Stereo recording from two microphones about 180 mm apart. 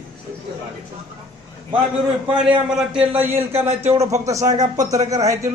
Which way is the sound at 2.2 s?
5° right (ahead or behind).